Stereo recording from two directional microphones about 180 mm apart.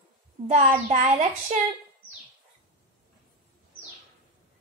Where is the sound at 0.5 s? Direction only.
40° right (ahead or behind).